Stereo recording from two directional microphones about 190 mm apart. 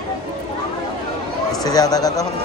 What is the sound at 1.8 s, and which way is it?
Speech, 20° left (ahead or behind).